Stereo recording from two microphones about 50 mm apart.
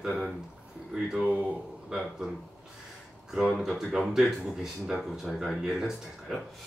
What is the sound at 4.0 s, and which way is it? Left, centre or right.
Speech, centre.